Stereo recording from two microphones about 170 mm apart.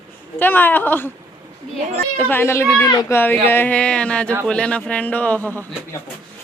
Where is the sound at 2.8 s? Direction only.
20° left (ahead or behind).